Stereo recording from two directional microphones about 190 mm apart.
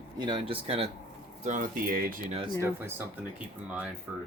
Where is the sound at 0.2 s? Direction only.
25° right (ahead or behind).